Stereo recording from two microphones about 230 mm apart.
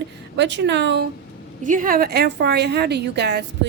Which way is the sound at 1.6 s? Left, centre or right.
Right.